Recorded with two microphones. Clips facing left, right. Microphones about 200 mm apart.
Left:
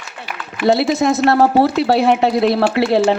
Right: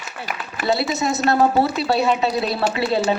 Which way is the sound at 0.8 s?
55° left (ahead or behind).